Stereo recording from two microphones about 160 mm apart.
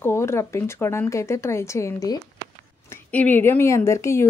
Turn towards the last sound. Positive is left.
turn(degrees=20)  # may be behind; listen again after turning